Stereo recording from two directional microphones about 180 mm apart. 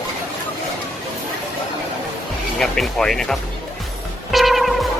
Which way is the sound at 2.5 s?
Centre (ahead or behind).